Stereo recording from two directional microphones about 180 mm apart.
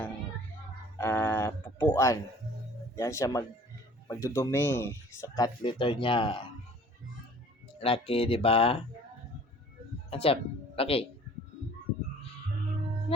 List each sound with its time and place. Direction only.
0.9 s music: 10° left (ahead or behind)
2.9 s speech: 15° left (ahead or behind)
7.8 s speech: 30° left (ahead or behind)
10.1 s music: 30° left (ahead or behind)
10.8 s speech: 30° left (ahead or behind)